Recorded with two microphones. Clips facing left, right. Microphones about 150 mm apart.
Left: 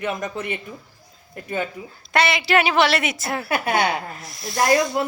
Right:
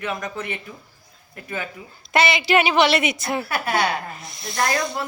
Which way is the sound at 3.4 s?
20° left (ahead or behind).